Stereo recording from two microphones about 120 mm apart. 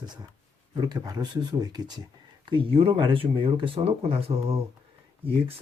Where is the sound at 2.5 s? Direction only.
45° right (ahead or behind).